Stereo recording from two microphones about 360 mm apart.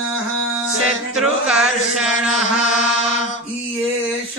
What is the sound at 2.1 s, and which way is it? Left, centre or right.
Mantra, centre.